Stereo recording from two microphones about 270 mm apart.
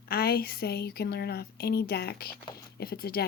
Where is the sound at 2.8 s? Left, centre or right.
Left.